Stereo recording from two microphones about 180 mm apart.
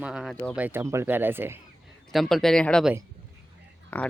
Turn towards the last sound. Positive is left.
turn(degrees=10)  # may be behind; listen again after turning